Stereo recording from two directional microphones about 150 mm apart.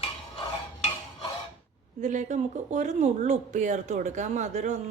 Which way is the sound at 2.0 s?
55° right (ahead or behind).